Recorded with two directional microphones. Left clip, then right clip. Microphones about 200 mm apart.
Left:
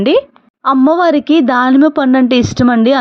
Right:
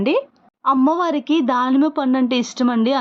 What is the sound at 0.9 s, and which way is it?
A woman's voice, 20° left (ahead or behind).